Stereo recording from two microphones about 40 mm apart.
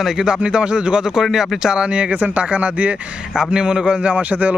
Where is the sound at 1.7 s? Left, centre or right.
Right.